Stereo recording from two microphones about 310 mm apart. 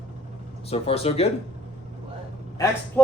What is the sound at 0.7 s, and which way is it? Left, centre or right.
Speech, centre.